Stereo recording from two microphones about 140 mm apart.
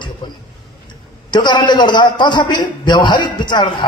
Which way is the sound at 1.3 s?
30° left (ahead or behind).